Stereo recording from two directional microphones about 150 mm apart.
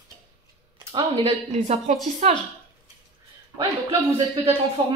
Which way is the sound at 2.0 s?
50° right (ahead or behind).